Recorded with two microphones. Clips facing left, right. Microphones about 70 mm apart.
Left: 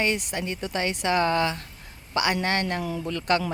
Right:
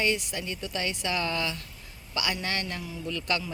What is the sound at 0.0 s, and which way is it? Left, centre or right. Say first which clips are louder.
A woman's voice: left 2 dB; left.